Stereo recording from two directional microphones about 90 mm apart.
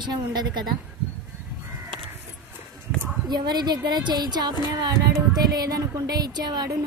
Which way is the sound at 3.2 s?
50° right (ahead or behind).